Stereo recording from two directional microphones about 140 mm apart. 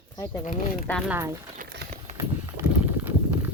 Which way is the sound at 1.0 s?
15° right (ahead or behind).